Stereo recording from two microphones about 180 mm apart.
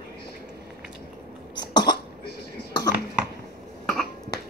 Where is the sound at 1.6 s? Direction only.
25° left (ahead or behind).